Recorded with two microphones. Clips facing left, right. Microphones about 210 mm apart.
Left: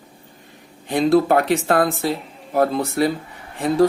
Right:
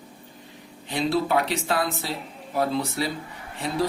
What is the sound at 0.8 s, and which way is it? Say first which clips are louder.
Speech: left 8 dB; 50° left (ahead or behind).